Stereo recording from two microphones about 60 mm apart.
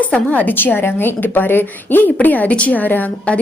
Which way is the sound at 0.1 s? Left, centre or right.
Left.